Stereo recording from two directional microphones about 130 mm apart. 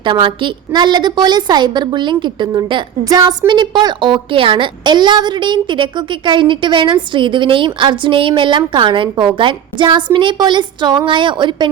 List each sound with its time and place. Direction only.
0.0 s a woman's voice: 40° right (ahead or behind)